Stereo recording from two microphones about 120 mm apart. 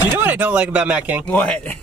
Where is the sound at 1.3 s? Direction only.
10° left (ahead or behind).